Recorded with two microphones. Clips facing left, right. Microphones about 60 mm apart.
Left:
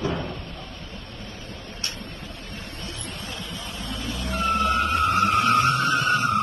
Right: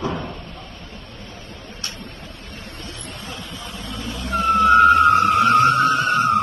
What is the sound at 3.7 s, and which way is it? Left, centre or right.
Vehicle, right.